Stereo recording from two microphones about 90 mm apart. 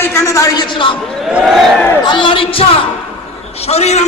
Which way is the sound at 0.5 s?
65° left (ahead or behind).